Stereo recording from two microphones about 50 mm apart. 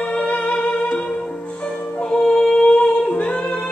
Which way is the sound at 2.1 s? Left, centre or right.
Centre.